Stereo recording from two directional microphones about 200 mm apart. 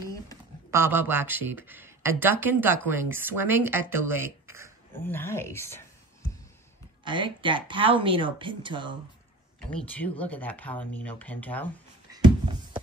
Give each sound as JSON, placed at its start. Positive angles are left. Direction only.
{"t": 0.7, "sound": "speech", "side_deg": -10}
{"t": 5.0, "sound": "speech", "side_deg": 10}
{"t": 7.1, "sound": "speech", "side_deg": -25}
{"t": 9.6, "sound": "speech", "side_deg": 5}